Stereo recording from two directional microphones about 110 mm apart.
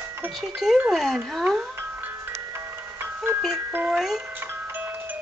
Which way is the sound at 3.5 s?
20° right (ahead or behind).